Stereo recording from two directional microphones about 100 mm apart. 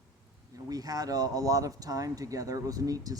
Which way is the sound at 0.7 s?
40° right (ahead or behind).